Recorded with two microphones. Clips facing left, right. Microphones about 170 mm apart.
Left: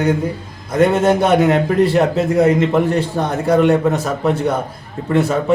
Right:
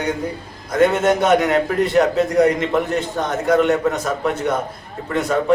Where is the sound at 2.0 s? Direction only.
5° left (ahead or behind).